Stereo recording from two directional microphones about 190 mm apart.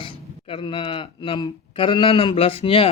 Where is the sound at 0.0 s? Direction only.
25° left (ahead or behind).